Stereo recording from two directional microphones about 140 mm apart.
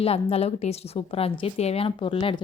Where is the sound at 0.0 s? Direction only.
45° left (ahead or behind).